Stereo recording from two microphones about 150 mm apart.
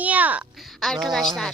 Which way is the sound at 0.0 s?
10° right (ahead or behind).